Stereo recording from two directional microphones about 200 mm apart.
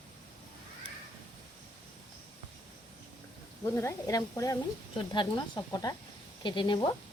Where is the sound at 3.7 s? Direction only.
15° left (ahead or behind).